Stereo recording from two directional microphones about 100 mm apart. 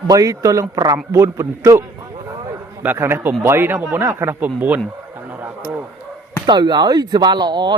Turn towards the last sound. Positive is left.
turn(degrees=-45)  # may be behind; listen again after turning